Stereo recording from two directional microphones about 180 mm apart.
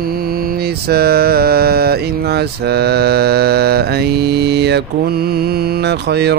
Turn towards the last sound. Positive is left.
turn(degrees=-65)  # may be behind; listen again after turning